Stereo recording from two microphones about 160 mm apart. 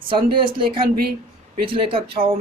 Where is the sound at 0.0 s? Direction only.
30° right (ahead or behind).